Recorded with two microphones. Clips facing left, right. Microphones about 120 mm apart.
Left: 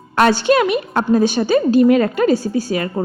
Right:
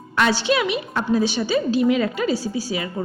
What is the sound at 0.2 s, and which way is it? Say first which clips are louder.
A woman's voice: left 6 dB; 50° left (ahead or behind).